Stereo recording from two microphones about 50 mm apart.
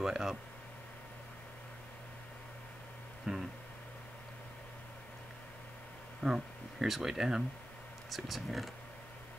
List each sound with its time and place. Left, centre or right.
0.0 s speech: centre
3.3 s speech: centre
6.2 s speech: centre